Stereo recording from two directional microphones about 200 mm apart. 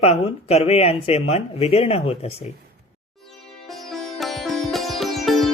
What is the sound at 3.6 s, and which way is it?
Sitar, centre (ahead or behind).